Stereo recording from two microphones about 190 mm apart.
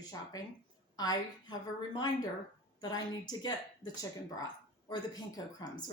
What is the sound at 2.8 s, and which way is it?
Speech, 20° left (ahead or behind).